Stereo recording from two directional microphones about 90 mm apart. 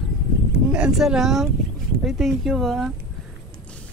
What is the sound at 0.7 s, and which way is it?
Speech, 5° right (ahead or behind).